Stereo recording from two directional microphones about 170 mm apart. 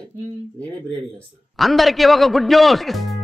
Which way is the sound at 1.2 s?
Centre (ahead or behind).